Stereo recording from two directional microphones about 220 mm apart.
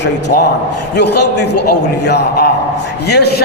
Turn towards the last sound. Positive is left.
turn(degrees=50)  # may be behind; listen again after turning